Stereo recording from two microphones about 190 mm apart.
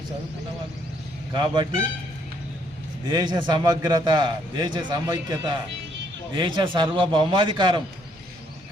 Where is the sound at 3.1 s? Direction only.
20° right (ahead or behind).